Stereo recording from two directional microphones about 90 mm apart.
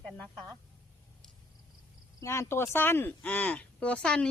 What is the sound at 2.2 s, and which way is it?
Speech, 30° left (ahead or behind).